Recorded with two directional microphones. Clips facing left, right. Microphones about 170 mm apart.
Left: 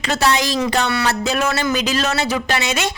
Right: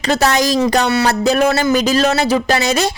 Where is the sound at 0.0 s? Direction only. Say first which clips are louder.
Right 4 dB; 40° right (ahead or behind).